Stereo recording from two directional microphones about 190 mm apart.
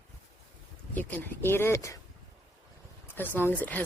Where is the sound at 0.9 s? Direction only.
10° left (ahead or behind).